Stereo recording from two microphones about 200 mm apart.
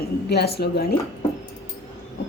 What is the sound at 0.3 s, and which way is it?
Speech, 55° left (ahead or behind).